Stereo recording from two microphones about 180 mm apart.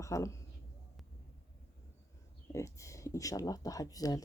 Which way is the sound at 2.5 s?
15° left (ahead or behind).